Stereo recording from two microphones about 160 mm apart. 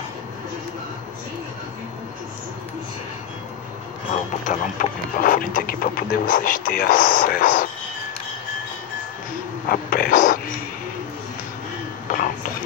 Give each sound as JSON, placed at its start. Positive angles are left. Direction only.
{"t": 4.5, "sound": "speech", "side_deg": 55}
{"t": 9.7, "sound": "speech", "side_deg": 65}
{"t": 12.1, "sound": "a sound", "side_deg": 60}